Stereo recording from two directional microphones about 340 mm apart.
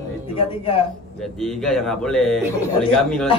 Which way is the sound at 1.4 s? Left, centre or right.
Centre.